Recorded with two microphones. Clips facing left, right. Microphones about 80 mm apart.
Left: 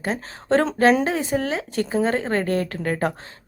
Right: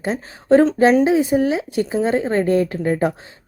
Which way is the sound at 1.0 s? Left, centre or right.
Centre.